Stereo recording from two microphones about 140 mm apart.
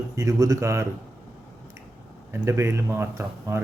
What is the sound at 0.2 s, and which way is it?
Speech, 25° right (ahead or behind).